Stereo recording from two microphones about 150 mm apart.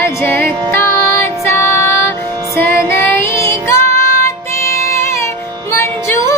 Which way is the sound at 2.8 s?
15° left (ahead or behind).